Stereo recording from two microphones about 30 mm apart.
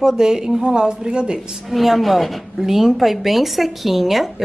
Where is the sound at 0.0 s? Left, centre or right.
Right.